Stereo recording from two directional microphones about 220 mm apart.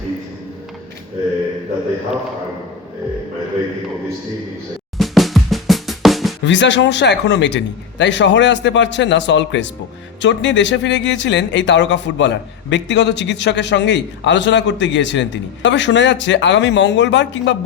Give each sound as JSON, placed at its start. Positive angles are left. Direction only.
{"t": 4.9, "sound": "drum", "side_deg": 0}
{"t": 6.4, "sound": "speech", "side_deg": 55}